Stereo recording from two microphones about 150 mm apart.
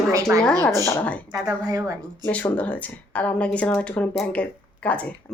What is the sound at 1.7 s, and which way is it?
Speech, 25° right (ahead or behind).